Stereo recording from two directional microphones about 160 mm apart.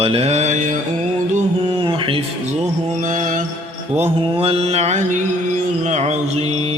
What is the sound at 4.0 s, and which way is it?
Speech, 35° right (ahead or behind).